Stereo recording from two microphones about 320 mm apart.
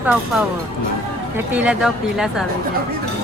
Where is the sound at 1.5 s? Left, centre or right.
Centre.